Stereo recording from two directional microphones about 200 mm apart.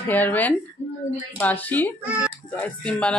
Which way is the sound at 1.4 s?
10° left (ahead or behind).